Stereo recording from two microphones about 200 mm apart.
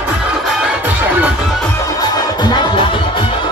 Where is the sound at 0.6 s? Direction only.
5° right (ahead or behind).